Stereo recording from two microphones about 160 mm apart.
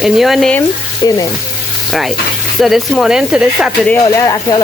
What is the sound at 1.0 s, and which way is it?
Speech, 20° left (ahead or behind).